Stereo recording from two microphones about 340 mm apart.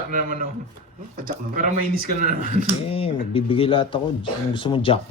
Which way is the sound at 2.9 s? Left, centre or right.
Centre.